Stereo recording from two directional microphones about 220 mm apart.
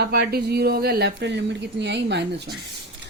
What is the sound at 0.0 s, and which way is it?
A woman's voice, 45° right (ahead or behind).